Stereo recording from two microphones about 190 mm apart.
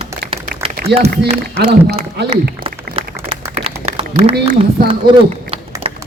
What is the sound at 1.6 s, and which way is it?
Speech, 55° right (ahead or behind).